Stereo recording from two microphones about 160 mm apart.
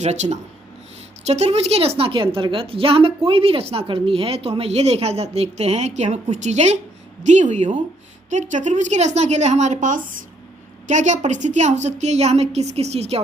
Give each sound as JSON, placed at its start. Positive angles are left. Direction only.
{"t": 0.0, "sound": "a woman's voice", "side_deg": -45}